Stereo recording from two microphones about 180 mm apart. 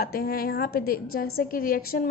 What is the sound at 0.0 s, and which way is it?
A woman's voice, 55° left (ahead or behind).